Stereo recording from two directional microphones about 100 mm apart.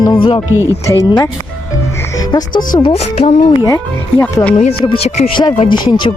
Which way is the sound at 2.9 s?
90° left.